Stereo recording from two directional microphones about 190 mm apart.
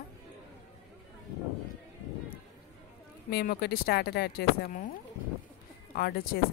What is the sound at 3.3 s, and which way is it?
Speech, 55° left (ahead or behind).